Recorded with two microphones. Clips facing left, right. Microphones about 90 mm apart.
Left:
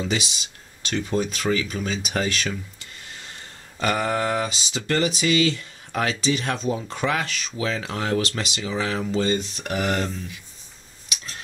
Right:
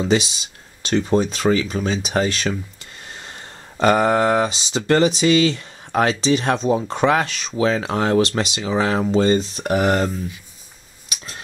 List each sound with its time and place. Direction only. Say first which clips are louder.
0.0 s speech: right 8 dB; 35° right (ahead or behind)